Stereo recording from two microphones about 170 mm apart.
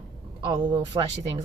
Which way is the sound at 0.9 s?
25° right (ahead or behind).